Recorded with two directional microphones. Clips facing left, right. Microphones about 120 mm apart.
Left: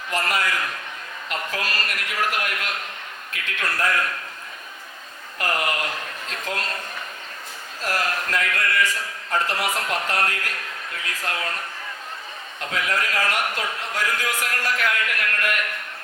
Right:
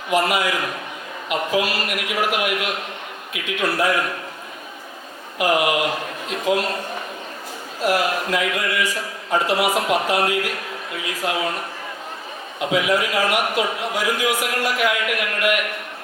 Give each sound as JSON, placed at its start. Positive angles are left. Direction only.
{"t": 0.1, "sound": "a man's voice", "side_deg": -10}
{"t": 5.4, "sound": "a man's voice", "side_deg": -10}
{"t": 7.8, "sound": "a man's voice", "side_deg": -10}
{"t": 12.5, "sound": "a man's voice", "side_deg": -10}